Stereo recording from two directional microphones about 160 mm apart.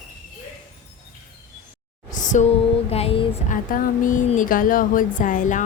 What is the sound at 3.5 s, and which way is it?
Speech, 60° left (ahead or behind).